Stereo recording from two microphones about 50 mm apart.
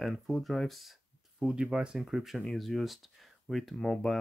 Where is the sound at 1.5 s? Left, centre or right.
Centre.